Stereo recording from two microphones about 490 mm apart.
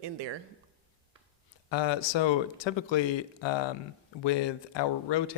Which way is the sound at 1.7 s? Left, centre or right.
Left.